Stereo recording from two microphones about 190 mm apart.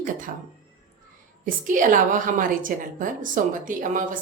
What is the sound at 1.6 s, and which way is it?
A woman's voice, 45° right (ahead or behind).